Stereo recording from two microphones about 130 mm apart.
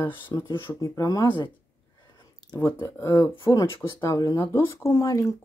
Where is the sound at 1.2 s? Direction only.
40° left (ahead or behind).